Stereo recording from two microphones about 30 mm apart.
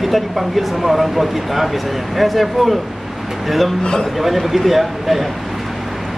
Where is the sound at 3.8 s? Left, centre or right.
Left.